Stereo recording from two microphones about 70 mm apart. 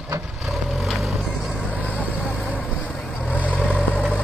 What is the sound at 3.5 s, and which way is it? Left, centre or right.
Vehicle, left.